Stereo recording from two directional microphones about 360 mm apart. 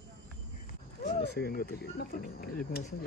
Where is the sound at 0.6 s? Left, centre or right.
Left.